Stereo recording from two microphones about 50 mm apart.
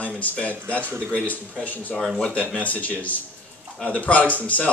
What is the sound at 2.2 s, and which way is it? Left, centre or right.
Speech, left.